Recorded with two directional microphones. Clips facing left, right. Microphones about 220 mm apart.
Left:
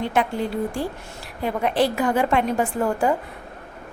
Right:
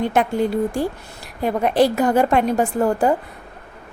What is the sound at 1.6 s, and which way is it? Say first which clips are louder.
A woman's voice: right 4 dB; 40° right (ahead or behind).